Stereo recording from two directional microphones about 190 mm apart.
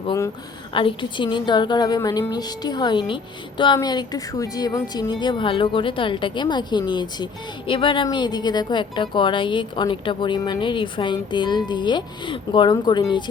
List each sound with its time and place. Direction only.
0.7 s a woman's voice: 25° left (ahead or behind)